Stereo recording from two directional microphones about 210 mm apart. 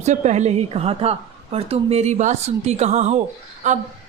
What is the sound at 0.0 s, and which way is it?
A woman's voice, 35° right (ahead or behind).